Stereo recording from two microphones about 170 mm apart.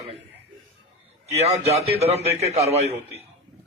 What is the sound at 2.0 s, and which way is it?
Speech, 35° right (ahead or behind).